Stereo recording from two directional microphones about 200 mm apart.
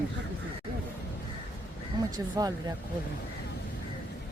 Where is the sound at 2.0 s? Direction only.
20° right (ahead or behind).